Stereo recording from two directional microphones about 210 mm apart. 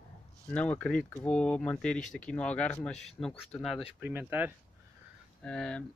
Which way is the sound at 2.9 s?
30° left (ahead or behind).